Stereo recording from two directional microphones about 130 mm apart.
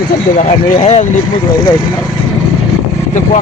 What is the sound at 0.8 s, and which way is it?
Speech, 60° left (ahead or behind).